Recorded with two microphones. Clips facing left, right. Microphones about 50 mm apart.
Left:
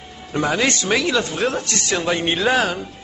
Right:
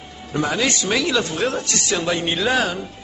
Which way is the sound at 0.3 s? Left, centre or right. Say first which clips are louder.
Left 1 dB; centre.